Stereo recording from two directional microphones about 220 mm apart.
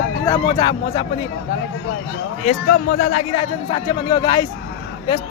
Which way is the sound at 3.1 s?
30° left (ahead or behind).